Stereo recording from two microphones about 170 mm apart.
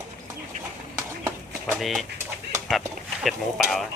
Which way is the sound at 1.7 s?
Centre (ahead or behind).